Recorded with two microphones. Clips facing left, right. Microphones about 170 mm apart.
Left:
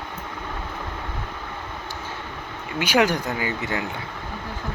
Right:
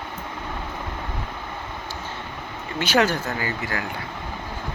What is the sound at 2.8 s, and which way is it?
Speech, 10° left (ahead or behind).